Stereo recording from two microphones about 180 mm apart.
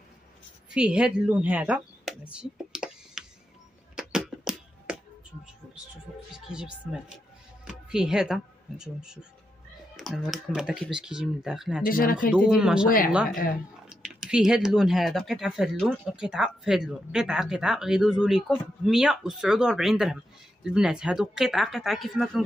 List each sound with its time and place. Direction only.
0.7 s speech: 5° right (ahead or behind)
3.9 s a sound: 5° right (ahead or behind)
6.3 s speech: 5° right (ahead or behind)
11.8 s speech: 50° left (ahead or behind)
12.3 s speech: 5° right (ahead or behind)
13.8 s speech: 5° right (ahead or behind)